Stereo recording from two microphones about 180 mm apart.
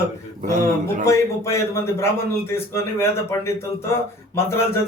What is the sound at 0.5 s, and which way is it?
Speech, 45° right (ahead or behind).